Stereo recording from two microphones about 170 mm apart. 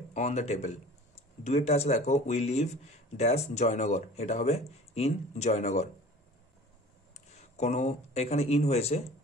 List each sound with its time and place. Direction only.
0.1 s a man's voice: 40° left (ahead or behind)
7.2 s speech: 40° left (ahead or behind)